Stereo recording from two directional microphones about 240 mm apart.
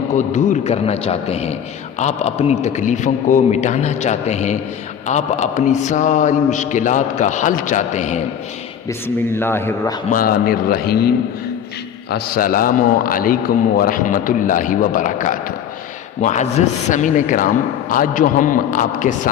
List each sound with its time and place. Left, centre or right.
0.1 s a man's voice: left
8.9 s speech: centre
10.1 s a man's voice: left
12.1 s a man's voice: left